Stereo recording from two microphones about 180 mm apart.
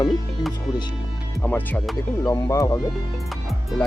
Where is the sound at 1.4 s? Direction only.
10° left (ahead or behind).